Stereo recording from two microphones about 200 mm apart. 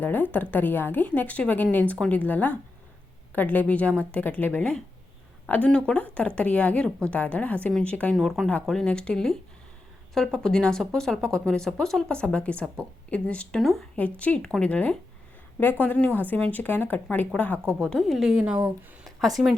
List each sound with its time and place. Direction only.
0.0 s a woman's voice: 10° left (ahead or behind)